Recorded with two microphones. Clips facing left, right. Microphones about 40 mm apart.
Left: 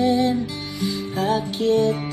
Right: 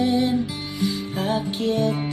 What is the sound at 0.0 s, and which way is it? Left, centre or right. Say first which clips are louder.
Music: left 1 dB; right.